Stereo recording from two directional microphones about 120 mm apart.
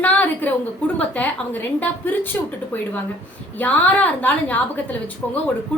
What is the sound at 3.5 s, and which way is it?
A woman's voice, 15° left (ahead or behind).